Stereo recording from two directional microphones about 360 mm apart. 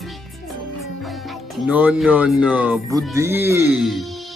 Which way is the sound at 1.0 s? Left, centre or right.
Centre.